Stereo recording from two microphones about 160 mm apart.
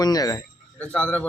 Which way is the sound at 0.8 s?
10° left (ahead or behind).